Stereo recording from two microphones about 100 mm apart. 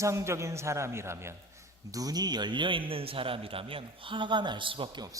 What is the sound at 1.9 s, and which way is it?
A man's voice, 35° right (ahead or behind).